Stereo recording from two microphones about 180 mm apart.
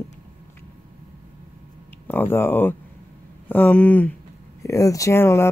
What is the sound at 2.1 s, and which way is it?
Speech, 10° left (ahead or behind).